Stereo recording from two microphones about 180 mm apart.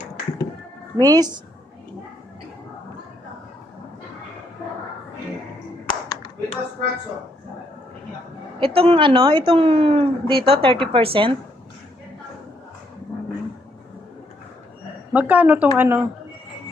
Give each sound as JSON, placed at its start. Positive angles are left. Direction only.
{"t": 0.9, "sound": "a woman's voice", "side_deg": -20}
{"t": 5.9, "sound": "clapping", "side_deg": 25}
{"t": 8.5, "sound": "a woman's voice", "side_deg": -30}
{"t": 15.1, "sound": "speech", "side_deg": -10}